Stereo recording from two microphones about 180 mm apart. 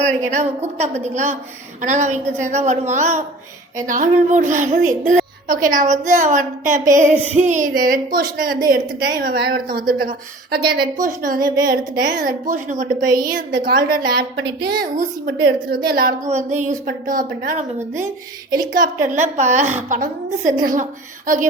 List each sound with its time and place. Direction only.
0.0 s a woman's voice: 40° right (ahead or behind); by 14.5 s 65° right (ahead or behind)
14.8 s a woman's voice: 55° right (ahead or behind)
16.3 s a woman's voice: 40° right (ahead or behind)
18.7 s a woman's voice: 45° right (ahead or behind)